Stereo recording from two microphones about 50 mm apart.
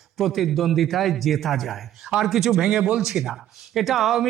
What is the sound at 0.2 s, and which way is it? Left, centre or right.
A man's voice, centre.